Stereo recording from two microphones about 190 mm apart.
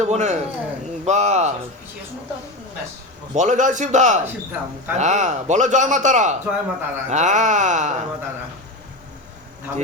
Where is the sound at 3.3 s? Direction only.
40° right (ahead or behind).